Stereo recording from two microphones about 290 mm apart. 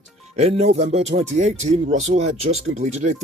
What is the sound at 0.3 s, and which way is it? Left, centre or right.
Speech, right.